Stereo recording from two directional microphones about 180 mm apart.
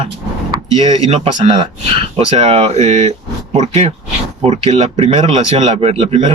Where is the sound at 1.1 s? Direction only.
35° right (ahead or behind).